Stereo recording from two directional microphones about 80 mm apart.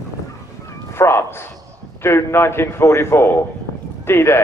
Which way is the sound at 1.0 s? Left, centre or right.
Left.